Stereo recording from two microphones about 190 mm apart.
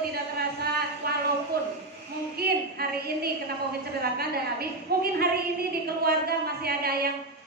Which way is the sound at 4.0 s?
55° right (ahead or behind).